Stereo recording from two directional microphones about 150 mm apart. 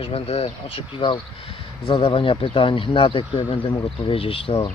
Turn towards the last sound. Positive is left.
turn(degrees=35)  # may be behind; listen again after turning